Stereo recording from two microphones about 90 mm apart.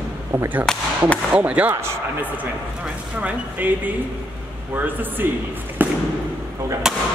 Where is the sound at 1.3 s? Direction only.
15° right (ahead or behind).